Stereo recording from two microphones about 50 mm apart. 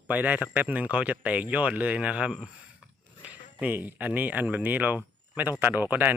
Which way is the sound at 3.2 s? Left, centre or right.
Right.